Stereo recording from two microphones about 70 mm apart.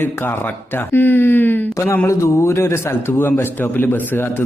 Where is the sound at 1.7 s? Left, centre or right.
Left.